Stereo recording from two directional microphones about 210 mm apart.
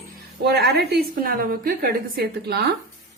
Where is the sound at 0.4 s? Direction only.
50° right (ahead or behind).